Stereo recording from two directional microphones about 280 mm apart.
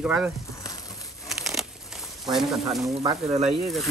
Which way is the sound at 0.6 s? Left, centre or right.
Centre.